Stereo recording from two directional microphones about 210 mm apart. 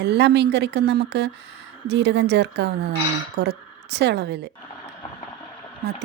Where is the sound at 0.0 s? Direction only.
55° right (ahead or behind).